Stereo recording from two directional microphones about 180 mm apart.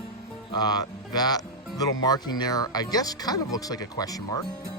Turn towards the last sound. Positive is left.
turn(degrees=20)  # may be behind; listen again after turning